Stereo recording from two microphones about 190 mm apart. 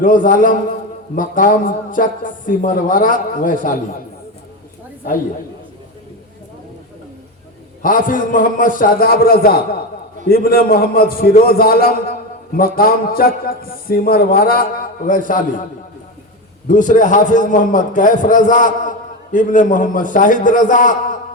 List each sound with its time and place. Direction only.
0.0 s a man's voice: 45° left (ahead or behind)
7.8 s a man's voice: 45° left (ahead or behind)
16.6 s a man's voice: 40° left (ahead or behind)